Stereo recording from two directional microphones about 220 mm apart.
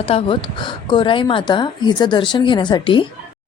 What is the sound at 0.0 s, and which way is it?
A woman's voice, 25° left (ahead or behind).